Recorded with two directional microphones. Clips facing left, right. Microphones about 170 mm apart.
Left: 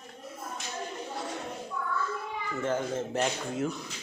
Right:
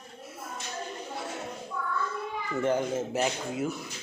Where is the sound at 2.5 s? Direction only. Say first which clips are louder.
Right 3 dB; 15° right (ahead or behind).